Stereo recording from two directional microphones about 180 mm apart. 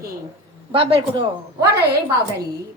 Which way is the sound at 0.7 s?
30° right (ahead or behind).